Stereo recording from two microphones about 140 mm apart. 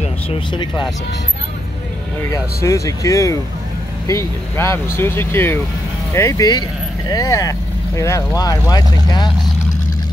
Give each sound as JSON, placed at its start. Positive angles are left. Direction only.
{"t": 0.5, "sound": "speech", "side_deg": 30}
{"t": 2.3, "sound": "speech", "side_deg": 20}